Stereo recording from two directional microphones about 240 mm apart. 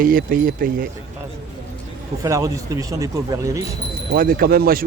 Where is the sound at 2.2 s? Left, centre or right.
Centre.